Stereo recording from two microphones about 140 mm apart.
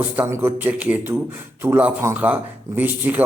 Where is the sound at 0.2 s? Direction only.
20° right (ahead or behind).